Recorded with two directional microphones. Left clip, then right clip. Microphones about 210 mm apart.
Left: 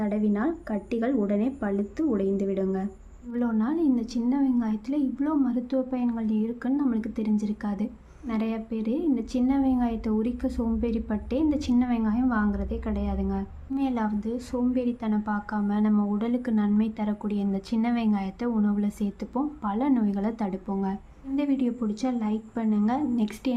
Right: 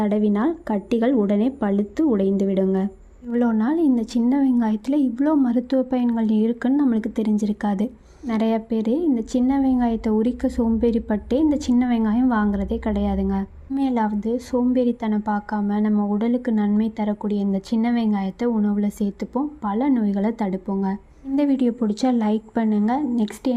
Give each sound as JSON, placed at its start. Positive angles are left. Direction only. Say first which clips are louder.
{"t": 0.0, "sound": "a woman's voice", "louder": "right 6 dB", "side_deg": -30}